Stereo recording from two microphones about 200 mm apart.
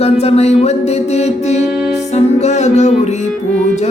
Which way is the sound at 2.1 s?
35° left (ahead or behind).